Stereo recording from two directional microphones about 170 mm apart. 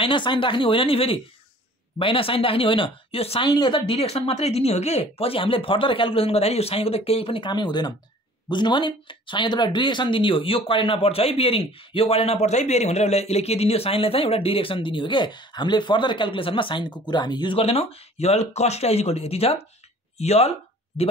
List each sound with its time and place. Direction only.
0.0 s speech: 30° left (ahead or behind)